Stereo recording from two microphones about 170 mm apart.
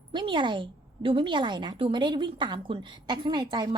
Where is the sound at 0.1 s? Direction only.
30° right (ahead or behind).